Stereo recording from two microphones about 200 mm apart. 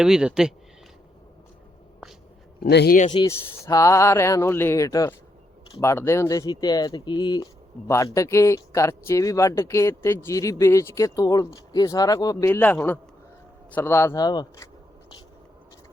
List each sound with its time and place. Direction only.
0.0 s speech: 5° right (ahead or behind)
2.6 s speech: 55° left (ahead or behind)
3.1 s speech: 20° left (ahead or behind)